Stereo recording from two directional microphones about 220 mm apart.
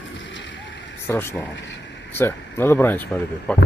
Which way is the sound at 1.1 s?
10° left (ahead or behind).